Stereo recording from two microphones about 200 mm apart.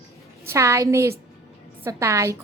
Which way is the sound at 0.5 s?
15° right (ahead or behind).